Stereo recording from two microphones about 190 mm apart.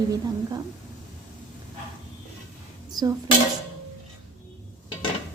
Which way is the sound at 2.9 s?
20° right (ahead or behind).